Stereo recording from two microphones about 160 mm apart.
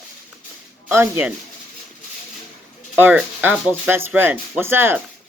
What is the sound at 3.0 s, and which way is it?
Speech, 10° right (ahead or behind).